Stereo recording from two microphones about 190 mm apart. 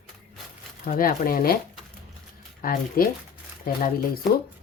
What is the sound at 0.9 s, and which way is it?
Speech, 45° left (ahead or behind).